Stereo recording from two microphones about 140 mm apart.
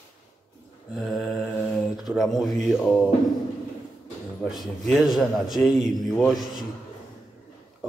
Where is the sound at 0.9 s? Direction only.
Centre (ahead or behind).